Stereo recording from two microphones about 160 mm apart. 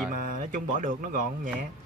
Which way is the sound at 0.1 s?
60° right (ahead or behind).